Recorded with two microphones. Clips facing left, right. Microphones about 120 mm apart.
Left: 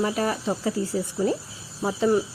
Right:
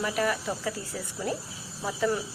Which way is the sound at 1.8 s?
25° left (ahead or behind).